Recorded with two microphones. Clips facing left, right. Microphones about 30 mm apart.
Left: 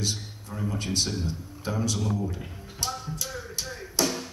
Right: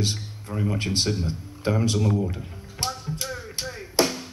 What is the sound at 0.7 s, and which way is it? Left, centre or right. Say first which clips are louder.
Speech: right 3 dB; right.